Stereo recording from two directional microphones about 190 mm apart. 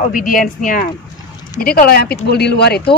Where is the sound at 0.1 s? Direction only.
45° left (ahead or behind).